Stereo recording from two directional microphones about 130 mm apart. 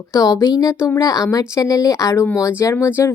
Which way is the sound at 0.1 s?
25° left (ahead or behind).